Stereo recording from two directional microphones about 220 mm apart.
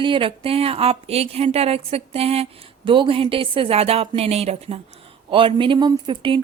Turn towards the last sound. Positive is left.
turn(degrees=-25)  # may be behind; listen again after turning